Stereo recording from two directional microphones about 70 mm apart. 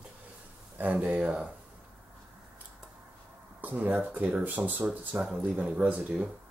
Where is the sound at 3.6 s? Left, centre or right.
Right.